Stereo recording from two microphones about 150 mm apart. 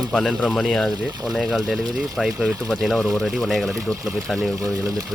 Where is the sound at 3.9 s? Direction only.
20° right (ahead or behind).